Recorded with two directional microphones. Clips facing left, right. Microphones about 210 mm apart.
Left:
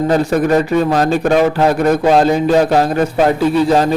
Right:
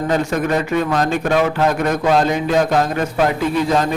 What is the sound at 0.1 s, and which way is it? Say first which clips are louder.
A man's voice: left 4 dB; 35° left (ahead or behind).